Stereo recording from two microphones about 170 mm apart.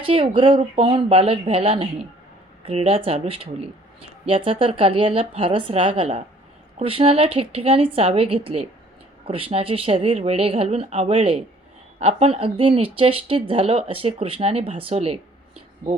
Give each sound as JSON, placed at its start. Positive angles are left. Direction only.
{"t": 0.0, "sound": "speech", "side_deg": -30}